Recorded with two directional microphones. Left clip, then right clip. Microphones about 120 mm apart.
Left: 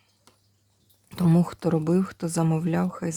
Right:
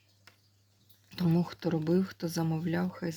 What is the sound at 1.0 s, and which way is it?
Speech, 50° left (ahead or behind).